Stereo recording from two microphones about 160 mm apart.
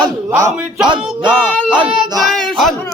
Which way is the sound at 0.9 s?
30° right (ahead or behind).